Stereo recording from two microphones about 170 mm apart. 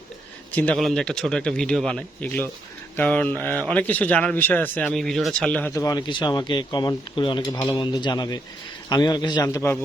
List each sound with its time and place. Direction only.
0.5 s a man's voice: 10° left (ahead or behind)